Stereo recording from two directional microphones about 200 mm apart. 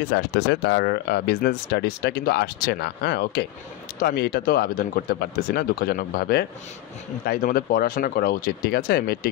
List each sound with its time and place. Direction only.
0.1 s speech: 60° left (ahead or behind)